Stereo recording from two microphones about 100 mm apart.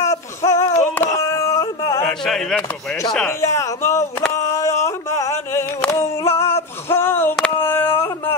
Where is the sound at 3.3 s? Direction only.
30° left (ahead or behind).